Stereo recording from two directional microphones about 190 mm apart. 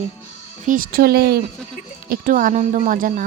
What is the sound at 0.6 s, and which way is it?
Speech, 45° right (ahead or behind).